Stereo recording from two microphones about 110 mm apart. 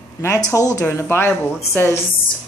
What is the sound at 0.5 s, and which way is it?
Speech, 30° left (ahead or behind).